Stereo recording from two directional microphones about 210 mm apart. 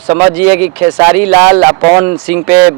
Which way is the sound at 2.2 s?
10° right (ahead or behind).